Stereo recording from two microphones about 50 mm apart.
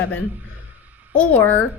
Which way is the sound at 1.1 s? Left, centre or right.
Left.